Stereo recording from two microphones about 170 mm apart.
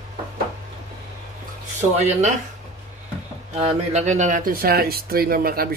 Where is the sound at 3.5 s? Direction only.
40° right (ahead or behind); by 5.7 s 60° right (ahead or behind).